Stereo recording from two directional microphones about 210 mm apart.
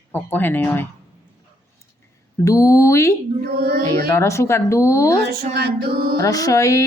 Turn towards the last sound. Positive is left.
turn(degrees=15)  # may be behind; listen again after turning